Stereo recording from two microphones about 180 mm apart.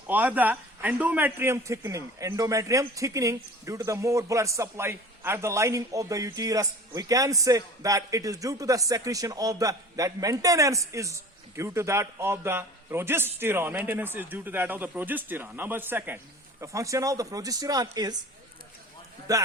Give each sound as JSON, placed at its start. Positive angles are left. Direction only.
{"t": 0.1, "sound": "speech", "side_deg": -10}
{"t": 19.3, "sound": "a man's voice", "side_deg": -20}